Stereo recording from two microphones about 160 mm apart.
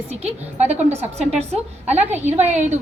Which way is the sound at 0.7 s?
15° right (ahead or behind).